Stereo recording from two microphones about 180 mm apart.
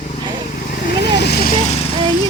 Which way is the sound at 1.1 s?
65° left (ahead or behind).